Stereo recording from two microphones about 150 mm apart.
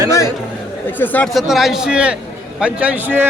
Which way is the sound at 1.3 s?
Centre (ahead or behind).